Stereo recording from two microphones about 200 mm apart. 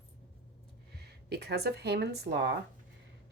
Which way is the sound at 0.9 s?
55° right (ahead or behind).